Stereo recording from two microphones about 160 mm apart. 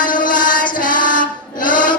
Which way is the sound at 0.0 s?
55° left (ahead or behind).